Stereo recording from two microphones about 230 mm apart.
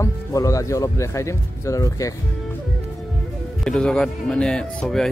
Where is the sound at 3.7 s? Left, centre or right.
Centre.